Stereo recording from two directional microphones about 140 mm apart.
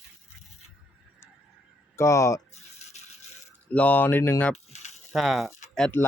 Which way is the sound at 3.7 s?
10° left (ahead or behind).